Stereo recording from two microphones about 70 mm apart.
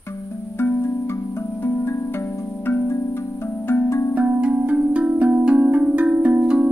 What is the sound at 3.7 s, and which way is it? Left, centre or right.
Music, left.